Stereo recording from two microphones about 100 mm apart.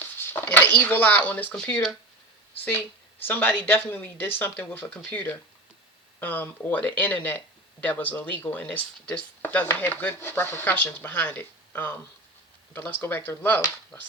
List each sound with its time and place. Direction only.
0.4 s speech: 20° left (ahead or behind)
3.2 s speech: 20° left (ahead or behind)